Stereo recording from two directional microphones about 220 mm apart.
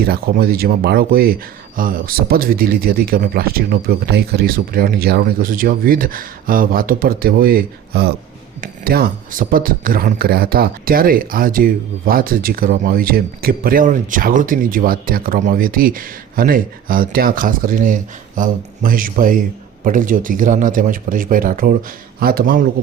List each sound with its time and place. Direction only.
0.0 s speech: 45° right (ahead or behind)